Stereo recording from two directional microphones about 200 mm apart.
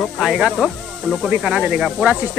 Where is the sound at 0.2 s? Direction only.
Centre (ahead or behind).